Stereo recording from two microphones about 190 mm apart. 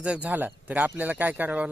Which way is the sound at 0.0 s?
5° right (ahead or behind).